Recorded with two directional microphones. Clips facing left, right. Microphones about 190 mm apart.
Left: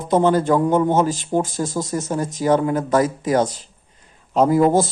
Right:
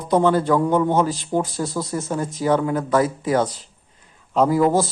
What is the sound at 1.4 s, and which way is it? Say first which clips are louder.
Speech: left 1 dB; 45° left (ahead or behind).